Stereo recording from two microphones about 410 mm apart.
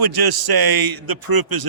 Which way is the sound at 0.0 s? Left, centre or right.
Right.